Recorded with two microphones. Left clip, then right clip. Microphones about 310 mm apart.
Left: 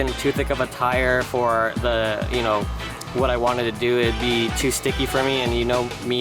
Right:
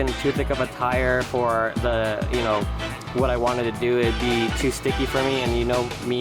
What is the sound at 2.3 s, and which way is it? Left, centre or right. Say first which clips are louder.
Speech: left 1 dB; centre.